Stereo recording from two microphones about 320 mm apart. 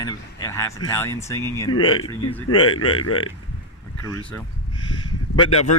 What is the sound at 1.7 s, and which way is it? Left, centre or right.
Speech, left.